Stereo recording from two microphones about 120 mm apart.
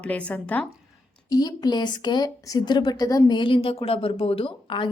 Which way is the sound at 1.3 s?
35° left (ahead or behind).